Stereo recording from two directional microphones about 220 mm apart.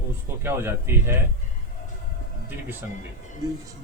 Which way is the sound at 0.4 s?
10° right (ahead or behind).